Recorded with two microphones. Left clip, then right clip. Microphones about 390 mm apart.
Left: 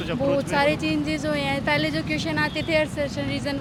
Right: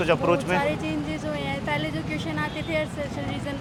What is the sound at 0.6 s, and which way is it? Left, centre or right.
Speech, left.